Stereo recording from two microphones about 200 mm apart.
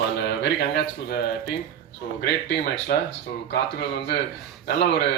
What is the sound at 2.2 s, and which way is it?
Speech, 55° left (ahead or behind).